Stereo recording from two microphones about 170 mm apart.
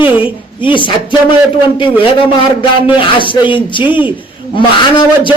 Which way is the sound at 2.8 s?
30° left (ahead or behind).